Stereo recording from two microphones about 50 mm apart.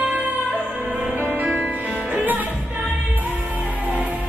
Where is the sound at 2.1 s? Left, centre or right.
Right.